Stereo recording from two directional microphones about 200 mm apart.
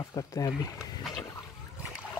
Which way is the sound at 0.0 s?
15° left (ahead or behind).